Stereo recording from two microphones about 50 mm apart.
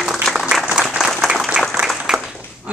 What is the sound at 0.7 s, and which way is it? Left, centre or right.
Applause, centre.